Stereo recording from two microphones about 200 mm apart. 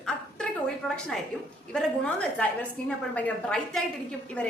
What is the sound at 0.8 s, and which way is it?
A woman's voice, centre (ahead or behind).